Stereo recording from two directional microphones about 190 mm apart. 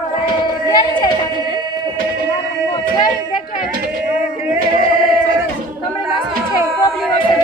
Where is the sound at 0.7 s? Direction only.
20° left (ahead or behind).